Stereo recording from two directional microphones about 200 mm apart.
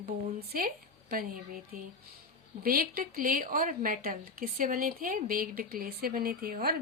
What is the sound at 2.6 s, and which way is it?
A woman's voice, 45° right (ahead or behind).